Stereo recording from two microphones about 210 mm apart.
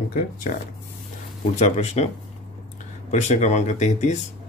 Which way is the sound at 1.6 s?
30° left (ahead or behind).